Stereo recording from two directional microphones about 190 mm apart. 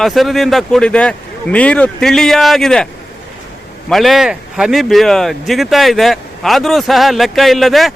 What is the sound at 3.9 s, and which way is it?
Speech, centre (ahead or behind).